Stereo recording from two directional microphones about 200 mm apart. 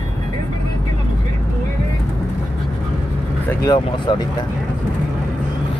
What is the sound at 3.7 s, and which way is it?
Speech, 25° left (ahead or behind).